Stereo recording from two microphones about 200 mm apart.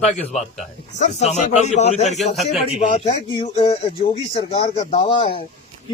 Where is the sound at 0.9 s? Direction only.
35° left (ahead or behind).